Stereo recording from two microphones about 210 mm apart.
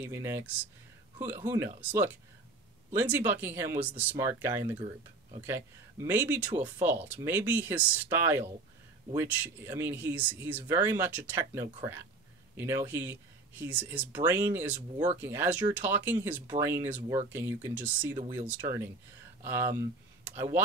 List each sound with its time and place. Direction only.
0.0 s speech: 10° right (ahead or behind)
6.0 s speech: 10° right (ahead or behind)